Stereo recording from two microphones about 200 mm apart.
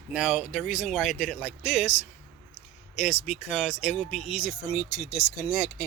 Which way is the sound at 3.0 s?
35° left (ahead or behind).